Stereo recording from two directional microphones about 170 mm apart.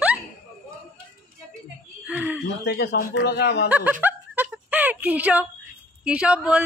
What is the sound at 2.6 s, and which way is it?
Speech, 75° left (ahead or behind).